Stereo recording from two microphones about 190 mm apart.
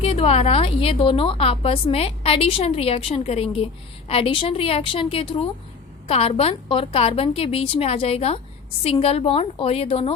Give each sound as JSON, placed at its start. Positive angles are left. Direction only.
{"t": 0.0, "sound": "a woman's voice", "side_deg": 30}